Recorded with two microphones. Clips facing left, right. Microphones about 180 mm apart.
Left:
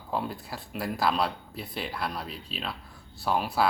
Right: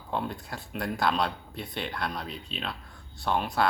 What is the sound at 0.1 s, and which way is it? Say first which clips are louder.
Speech: even; 5° left (ahead or behind).